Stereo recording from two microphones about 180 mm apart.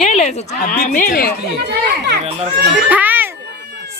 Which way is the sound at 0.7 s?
50° left (ahead or behind).